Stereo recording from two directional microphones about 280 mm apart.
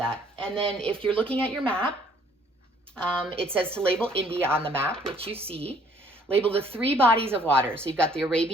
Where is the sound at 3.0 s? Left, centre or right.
Centre.